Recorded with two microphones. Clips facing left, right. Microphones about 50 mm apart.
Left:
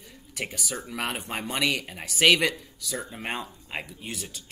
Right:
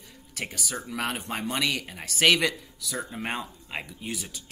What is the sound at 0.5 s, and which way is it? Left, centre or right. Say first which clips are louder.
Speech: even; centre.